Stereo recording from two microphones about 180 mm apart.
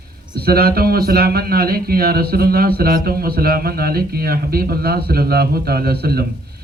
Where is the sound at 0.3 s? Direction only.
60° right (ahead or behind).